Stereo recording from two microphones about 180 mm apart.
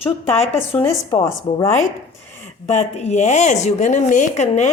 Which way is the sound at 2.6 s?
40° left (ahead or behind).